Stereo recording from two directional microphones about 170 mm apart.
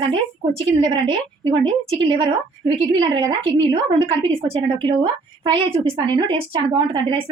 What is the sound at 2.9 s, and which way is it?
A woman's voice, 30° right (ahead or behind).